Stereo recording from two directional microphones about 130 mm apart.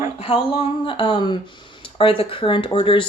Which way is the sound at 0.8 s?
40° left (ahead or behind).